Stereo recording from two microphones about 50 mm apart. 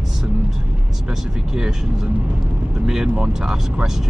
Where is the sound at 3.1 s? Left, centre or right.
Centre.